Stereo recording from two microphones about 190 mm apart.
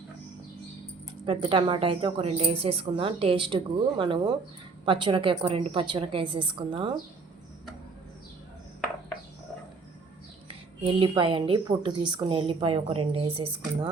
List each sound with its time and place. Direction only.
1.2 s a woman's voice: 25° right (ahead or behind)
10.5 s a woman's voice: 25° right (ahead or behind)